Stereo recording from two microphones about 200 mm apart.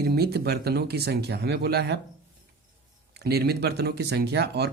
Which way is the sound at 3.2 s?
55° right (ahead or behind).